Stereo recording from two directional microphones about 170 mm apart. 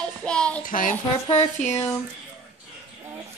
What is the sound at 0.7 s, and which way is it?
Speech, 50° left (ahead or behind).